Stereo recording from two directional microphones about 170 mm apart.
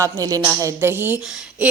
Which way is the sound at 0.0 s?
20° right (ahead or behind).